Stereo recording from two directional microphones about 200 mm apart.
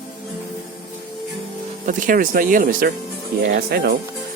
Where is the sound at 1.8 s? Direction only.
40° right (ahead or behind).